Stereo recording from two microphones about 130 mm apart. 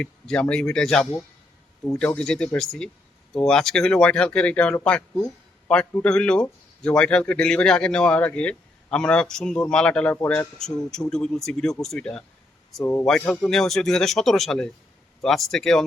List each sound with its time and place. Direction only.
0.0 s speech: 10° left (ahead or behind)
12.8 s a man's voice: 25° left (ahead or behind)
13.1 s speech: 10° left (ahead or behind)